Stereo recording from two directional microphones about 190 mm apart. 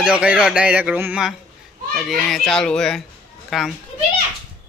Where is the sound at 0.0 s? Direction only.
5° right (ahead or behind).